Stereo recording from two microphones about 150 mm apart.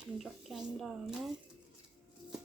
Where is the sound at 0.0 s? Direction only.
Centre (ahead or behind).